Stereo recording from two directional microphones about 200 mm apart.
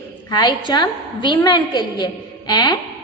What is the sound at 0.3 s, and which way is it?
A woman's voice, 20° left (ahead or behind).